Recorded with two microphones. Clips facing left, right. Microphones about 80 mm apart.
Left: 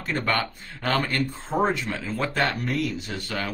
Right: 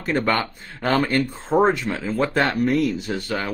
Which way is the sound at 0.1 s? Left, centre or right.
Right.